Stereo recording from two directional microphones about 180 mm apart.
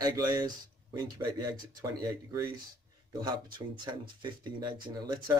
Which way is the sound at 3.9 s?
25° right (ahead or behind).